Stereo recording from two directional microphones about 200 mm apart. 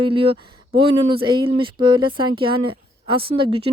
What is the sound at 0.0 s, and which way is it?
Speech, 25° right (ahead or behind).